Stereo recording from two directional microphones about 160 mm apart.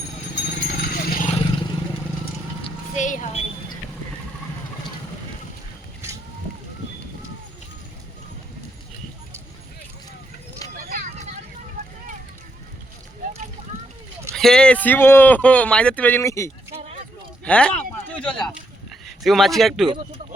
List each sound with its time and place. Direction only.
0.6 s horse: 60° left (ahead or behind)
1.3 s vehicle: 35° left (ahead or behind)
2.6 s music: 50° left (ahead or behind)
10.8 s a sound: 60° right (ahead or behind)
14.3 s speech: 5° left (ahead or behind); by 16.5 s 20° left (ahead or behind)
17.4 s speech: 5° left (ahead or behind)